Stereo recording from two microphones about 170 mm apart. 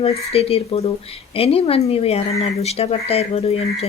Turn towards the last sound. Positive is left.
turn(degrees=35)  # may be behind; listen again after turning